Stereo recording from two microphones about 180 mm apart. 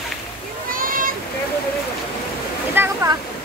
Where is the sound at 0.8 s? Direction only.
50° right (ahead or behind).